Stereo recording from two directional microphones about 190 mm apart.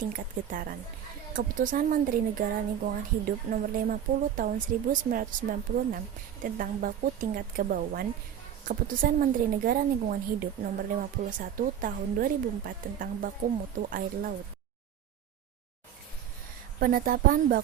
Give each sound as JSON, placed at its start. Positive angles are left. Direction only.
{"t": 0.0, "sound": "speech", "side_deg": -50}
{"t": 16.8, "sound": "speech", "side_deg": -50}